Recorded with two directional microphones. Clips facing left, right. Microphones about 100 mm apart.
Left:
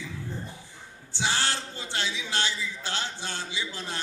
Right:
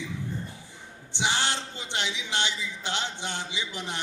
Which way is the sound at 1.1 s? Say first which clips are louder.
Right 1 dB; 20° right (ahead or behind).